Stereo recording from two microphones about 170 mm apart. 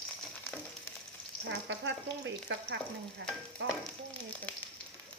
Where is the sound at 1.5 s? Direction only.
90° right.